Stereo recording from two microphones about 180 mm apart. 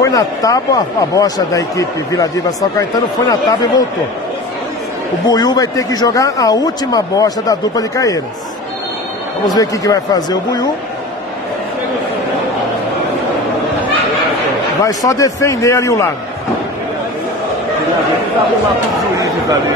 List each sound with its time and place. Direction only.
0.0 s speech: 20° left (ahead or behind)
5.3 s speech: 20° left (ahead or behind)
9.5 s speech: 20° left (ahead or behind)
14.8 s speech: 20° left (ahead or behind)
19.1 s speech: 20° right (ahead or behind)